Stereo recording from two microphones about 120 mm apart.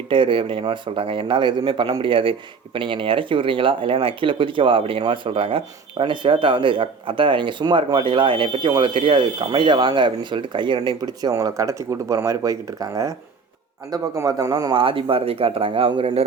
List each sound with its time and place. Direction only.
0.1 s speech: 45° right (ahead or behind)